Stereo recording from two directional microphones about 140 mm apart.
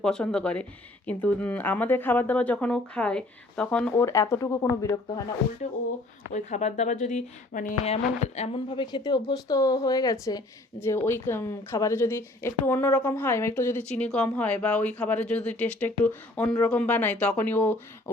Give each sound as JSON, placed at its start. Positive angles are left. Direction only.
{"t": 0.0, "sound": "speech", "side_deg": 5}
{"t": 4.0, "sound": "speech", "side_deg": 20}
{"t": 6.3, "sound": "speech", "side_deg": 55}
{"t": 7.9, "sound": "speech", "side_deg": 50}
{"t": 8.7, "sound": "speech", "side_deg": 35}